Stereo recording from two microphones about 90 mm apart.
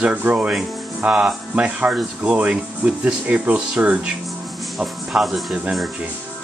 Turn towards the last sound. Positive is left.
turn(degrees=-10)  # may be behind; listen again after turning